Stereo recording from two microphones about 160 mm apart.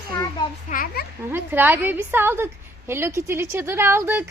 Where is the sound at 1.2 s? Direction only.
15° right (ahead or behind).